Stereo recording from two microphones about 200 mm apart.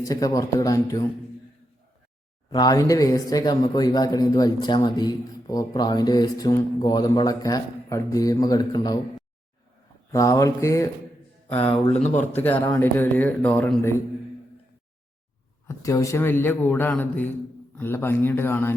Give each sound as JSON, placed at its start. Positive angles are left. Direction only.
{"t": 0.0, "sound": "a man's voice", "side_deg": 15}
{"t": 2.5, "sound": "speech", "side_deg": 20}
{"t": 10.1, "sound": "a man's voice", "side_deg": 15}
{"t": 11.9, "sound": "speech", "side_deg": 35}
{"t": 12.2, "sound": "a man's voice", "side_deg": 10}
{"t": 15.6, "sound": "a man's voice", "side_deg": 15}